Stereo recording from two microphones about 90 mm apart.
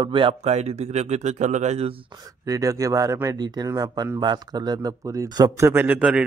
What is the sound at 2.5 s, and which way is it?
Speech, 40° right (ahead or behind).